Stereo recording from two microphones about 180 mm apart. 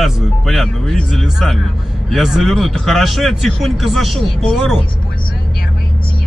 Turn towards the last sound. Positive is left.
turn(degrees=0)  # may be behind; listen again after turning